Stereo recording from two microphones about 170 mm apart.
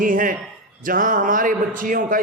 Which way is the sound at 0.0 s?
55° right (ahead or behind).